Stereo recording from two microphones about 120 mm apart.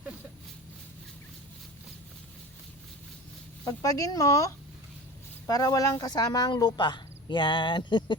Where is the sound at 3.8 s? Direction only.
30° left (ahead or behind).